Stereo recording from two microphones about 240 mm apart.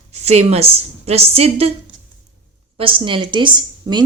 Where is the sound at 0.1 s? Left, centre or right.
Right.